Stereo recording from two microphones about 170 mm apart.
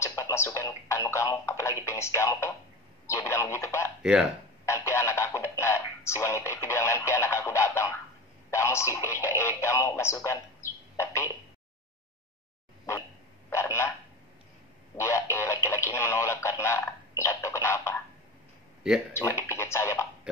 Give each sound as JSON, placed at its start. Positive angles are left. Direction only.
{"t": 0.0, "sound": "speech", "side_deg": 15}
{"t": 4.0, "sound": "speech", "side_deg": -5}
{"t": 4.6, "sound": "speech", "side_deg": 15}
{"t": 13.5, "sound": "telephone", "side_deg": 15}
{"t": 15.0, "sound": "speech", "side_deg": 15}
{"t": 19.1, "sound": "speech", "side_deg": 15}